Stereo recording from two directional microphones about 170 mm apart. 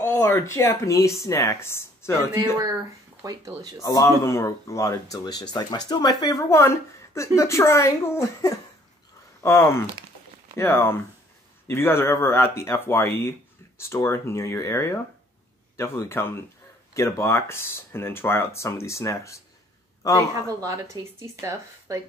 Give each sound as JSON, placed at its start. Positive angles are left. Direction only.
{"t": 0.0, "sound": "a woman's voice", "side_deg": 15}
{"t": 2.6, "sound": "speech", "side_deg": -20}
{"t": 3.8, "sound": "a woman's voice", "side_deg": 20}
{"t": 20.4, "sound": "speech", "side_deg": -20}